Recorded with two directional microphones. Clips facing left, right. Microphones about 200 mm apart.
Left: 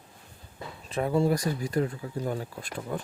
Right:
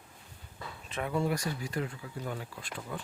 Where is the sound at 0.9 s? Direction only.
35° left (ahead or behind).